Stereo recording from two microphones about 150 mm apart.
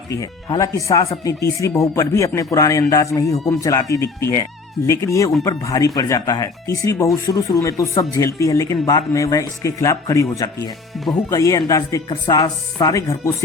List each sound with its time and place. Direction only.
0.1 s speech: 25° left (ahead or behind)